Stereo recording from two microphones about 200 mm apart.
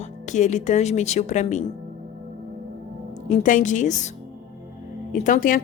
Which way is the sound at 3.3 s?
40° left (ahead or behind).